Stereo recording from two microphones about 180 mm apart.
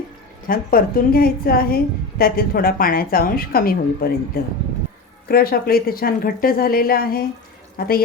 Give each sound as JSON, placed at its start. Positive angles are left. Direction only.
{"t": 0.4, "sound": "a woman's voice", "side_deg": 55}